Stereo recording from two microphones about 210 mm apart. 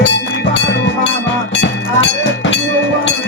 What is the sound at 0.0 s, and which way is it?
Music, 60° left (ahead or behind).